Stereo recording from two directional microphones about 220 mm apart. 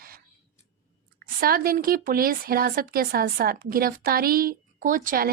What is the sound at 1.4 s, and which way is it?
Speech, 40° right (ahead or behind).